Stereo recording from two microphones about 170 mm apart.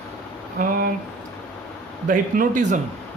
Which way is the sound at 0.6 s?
55° right (ahead or behind).